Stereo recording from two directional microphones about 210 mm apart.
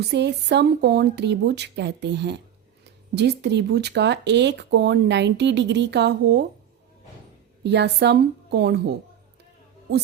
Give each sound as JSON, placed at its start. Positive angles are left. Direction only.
{"t": 0.0, "sound": "speech", "side_deg": -55}
{"t": 7.6, "sound": "speech", "side_deg": -55}